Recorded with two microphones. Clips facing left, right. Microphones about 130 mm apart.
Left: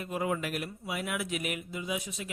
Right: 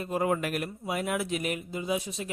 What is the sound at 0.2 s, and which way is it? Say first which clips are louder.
Speech: right 4 dB; 50° right (ahead or behind).